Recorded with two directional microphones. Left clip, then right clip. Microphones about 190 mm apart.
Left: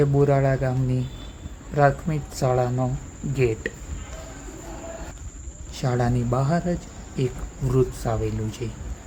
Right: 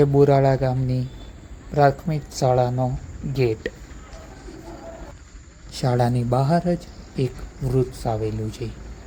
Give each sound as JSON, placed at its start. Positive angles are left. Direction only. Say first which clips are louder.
{"t": 0.0, "sound": "speech", "louder": "right 4 dB", "side_deg": -20}
{"t": 5.7, "sound": "speech", "louder": "right 3 dB", "side_deg": -20}